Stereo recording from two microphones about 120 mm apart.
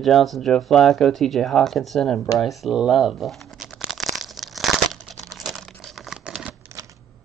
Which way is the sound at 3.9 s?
Centre (ahead or behind).